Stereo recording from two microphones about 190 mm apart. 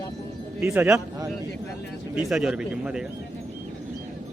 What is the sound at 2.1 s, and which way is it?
Speech, 5° right (ahead or behind).